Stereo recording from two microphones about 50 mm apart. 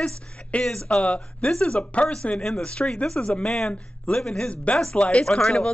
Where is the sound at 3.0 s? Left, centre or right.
Left.